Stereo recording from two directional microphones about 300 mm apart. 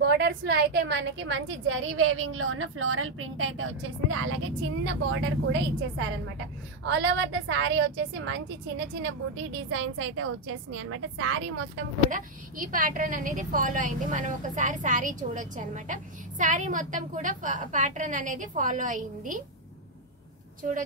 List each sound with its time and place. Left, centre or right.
0.0 s a woman's voice: right
12.1 s a woman's voice: right